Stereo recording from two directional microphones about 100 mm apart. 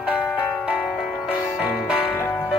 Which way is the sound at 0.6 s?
5° right (ahead or behind).